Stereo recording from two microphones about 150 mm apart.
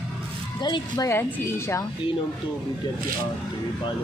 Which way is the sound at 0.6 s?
25° left (ahead or behind).